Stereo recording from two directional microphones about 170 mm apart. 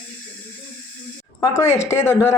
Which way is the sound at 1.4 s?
15° left (ahead or behind).